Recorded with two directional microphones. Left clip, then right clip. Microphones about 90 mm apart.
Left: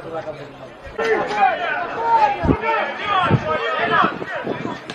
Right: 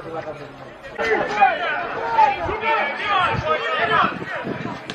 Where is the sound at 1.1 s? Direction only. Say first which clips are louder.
Even; centre (ahead or behind).